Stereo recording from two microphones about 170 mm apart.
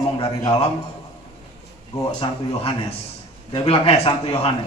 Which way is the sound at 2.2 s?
30° left (ahead or behind).